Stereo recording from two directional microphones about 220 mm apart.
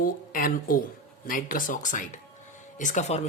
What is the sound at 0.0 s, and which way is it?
Speech, 40° left (ahead or behind).